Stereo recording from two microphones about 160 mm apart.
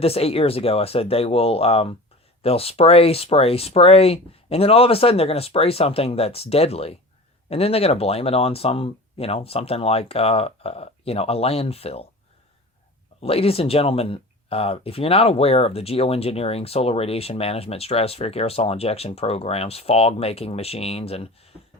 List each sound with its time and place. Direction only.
0.0 s speech: 40° left (ahead or behind)
13.2 s speech: 40° left (ahead or behind)